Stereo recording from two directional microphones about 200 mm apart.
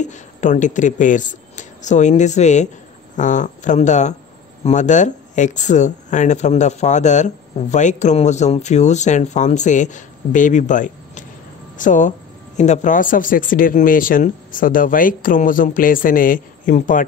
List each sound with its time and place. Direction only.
0.0 s speech: 35° left (ahead or behind)